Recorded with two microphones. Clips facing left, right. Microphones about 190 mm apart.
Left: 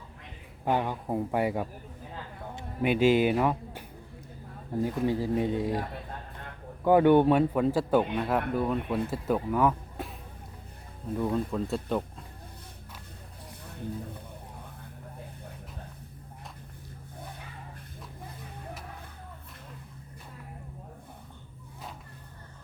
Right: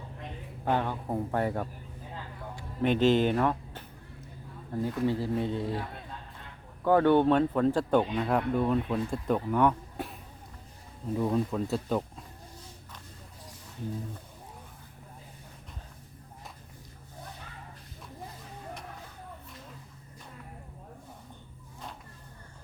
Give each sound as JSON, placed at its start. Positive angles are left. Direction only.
{"t": 0.6, "sound": "speech", "side_deg": 15}
{"t": 2.8, "sound": "speech", "side_deg": 10}
{"t": 5.7, "sound": "a sound", "side_deg": 55}
{"t": 6.8, "sound": "speech", "side_deg": 15}